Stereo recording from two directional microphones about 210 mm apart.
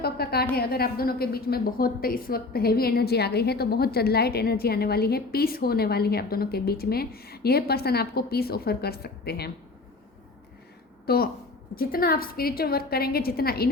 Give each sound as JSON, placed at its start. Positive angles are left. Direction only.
{"t": 0.0, "sound": "a sound", "side_deg": 50}
{"t": 0.5, "sound": "a woman's voice", "side_deg": 45}
{"t": 11.0, "sound": "a woman's voice", "side_deg": 45}